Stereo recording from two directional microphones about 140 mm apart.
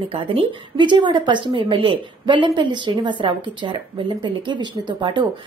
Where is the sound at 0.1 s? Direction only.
40° right (ahead or behind).